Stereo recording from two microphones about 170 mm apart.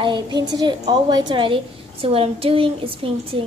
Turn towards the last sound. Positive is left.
turn(degrees=-35)  # may be behind; listen again after turning